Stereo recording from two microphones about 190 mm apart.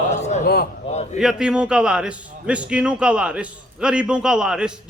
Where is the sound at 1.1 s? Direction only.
5° right (ahead or behind).